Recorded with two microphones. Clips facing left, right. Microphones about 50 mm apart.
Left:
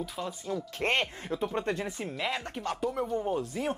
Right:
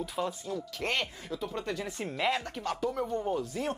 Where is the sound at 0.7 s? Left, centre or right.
Left.